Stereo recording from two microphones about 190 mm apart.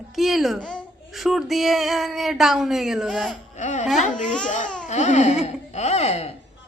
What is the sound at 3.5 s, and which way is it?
Speech, 35° left (ahead or behind).